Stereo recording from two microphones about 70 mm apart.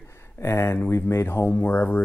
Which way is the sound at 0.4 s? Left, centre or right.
Left.